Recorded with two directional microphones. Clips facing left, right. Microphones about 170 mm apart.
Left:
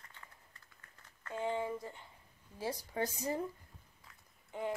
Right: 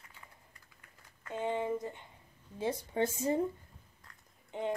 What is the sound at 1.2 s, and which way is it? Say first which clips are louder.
Speech: right 2 dB; 20° right (ahead or behind).